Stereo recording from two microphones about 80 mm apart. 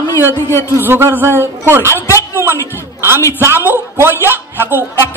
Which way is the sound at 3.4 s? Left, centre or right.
Right.